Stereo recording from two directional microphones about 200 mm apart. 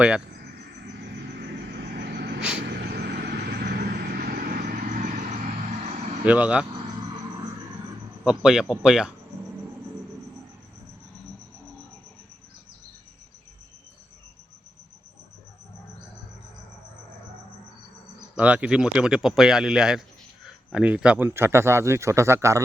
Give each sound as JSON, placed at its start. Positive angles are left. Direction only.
{"t": 1.7, "sound": "vehicle", "side_deg": -50}
{"t": 6.2, "sound": "speech", "side_deg": -5}
{"t": 8.2, "sound": "speech", "side_deg": -5}
{"t": 18.3, "sound": "speech", "side_deg": -5}